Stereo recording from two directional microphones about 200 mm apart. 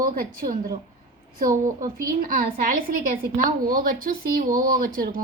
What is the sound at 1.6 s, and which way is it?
Speech, 40° right (ahead or behind).